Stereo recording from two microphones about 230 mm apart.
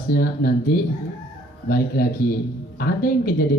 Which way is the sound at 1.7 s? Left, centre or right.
Left.